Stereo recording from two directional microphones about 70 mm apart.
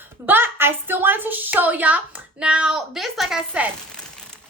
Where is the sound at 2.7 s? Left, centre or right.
Centre.